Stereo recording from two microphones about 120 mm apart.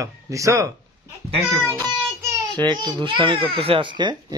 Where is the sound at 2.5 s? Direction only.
35° right (ahead or behind).